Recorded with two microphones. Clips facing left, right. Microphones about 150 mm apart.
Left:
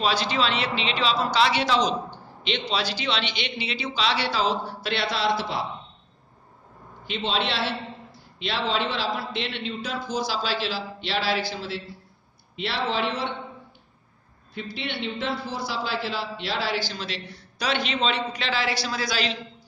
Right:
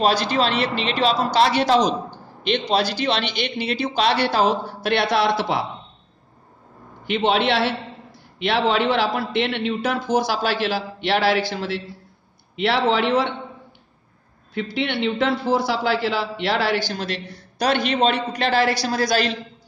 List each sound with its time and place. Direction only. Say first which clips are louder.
0.0 s speech: right 5 dB; 45° right (ahead or behind)
2.0 s a sound: right 6 dB; 50° right (ahead or behind)
2.7 s speech: right 7 dB; 45° right (ahead or behind); by 5.7 s 65° right (ahead or behind)
7.1 s a man's voice: right 8 dB; 60° right (ahead or behind)
14.5 s a man's voice: right 8 dB; 70° right (ahead or behind)
16.9 s speech: right 6 dB; 50° right (ahead or behind)